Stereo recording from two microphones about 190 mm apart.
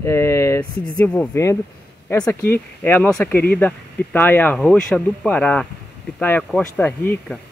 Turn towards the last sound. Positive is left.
turn(degrees=5)  # may be behind; listen again after turning